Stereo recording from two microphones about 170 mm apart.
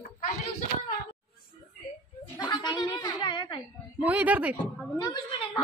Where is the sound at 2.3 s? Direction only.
25° left (ahead or behind).